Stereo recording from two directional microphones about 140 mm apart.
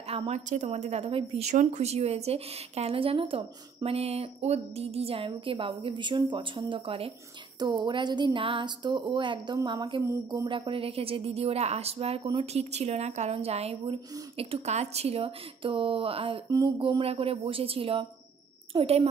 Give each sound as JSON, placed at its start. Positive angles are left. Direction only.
{"t": 0.1, "sound": "a woman's voice", "side_deg": -45}
{"t": 0.5, "sound": "a woman's voice", "side_deg": -60}
{"t": 1.5, "sound": "a woman's voice", "side_deg": -55}
{"t": 10.4, "sound": "a sound", "side_deg": -25}
{"t": 10.7, "sound": "a woman's voice", "side_deg": -45}
{"t": 16.4, "sound": "a sound", "side_deg": -30}
{"t": 17.0, "sound": "a woman's voice", "side_deg": -45}